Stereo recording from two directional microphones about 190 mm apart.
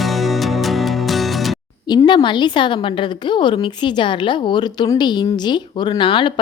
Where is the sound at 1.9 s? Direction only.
20° left (ahead or behind).